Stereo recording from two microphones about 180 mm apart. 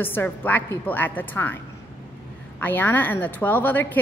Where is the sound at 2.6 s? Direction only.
10° left (ahead or behind).